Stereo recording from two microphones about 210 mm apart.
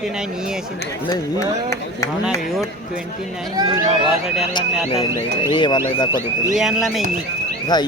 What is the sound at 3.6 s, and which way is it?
Speech, 20° right (ahead or behind).